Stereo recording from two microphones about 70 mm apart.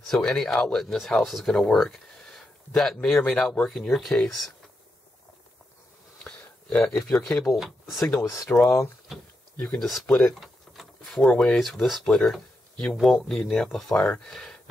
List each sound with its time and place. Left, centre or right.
0.1 s speech: centre
6.8 s speech: centre
7.5 s speech: centre
8.2 s speech: left
8.5 s speech: left
9.8 s speech: centre